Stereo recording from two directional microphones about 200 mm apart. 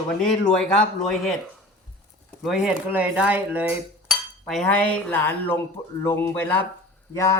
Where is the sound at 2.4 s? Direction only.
5° right (ahead or behind).